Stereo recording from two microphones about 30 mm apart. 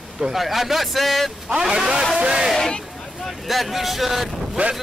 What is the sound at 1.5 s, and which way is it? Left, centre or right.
Speech, right.